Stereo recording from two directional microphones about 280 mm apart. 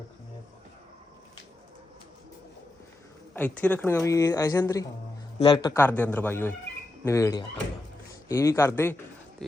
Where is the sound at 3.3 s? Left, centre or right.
Centre.